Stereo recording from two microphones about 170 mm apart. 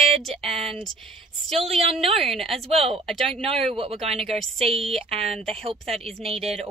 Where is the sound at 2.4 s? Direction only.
Centre (ahead or behind).